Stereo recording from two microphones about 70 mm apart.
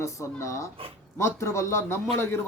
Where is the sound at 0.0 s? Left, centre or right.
Left.